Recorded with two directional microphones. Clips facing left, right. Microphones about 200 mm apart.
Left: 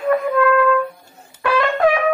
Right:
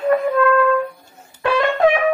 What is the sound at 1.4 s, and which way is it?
Brass instrument, 25° right (ahead or behind).